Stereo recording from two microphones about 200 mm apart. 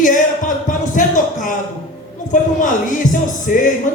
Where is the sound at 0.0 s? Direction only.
40° left (ahead or behind).